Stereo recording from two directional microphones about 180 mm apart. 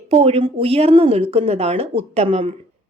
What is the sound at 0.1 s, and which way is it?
A woman's voice, 35° right (ahead or behind).